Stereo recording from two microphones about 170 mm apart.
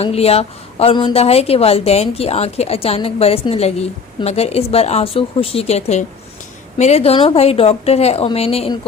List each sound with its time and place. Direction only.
0.0 s a woman's voice: 35° left (ahead or behind)